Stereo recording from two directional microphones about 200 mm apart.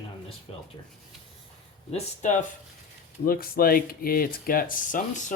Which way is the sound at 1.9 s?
35° left (ahead or behind).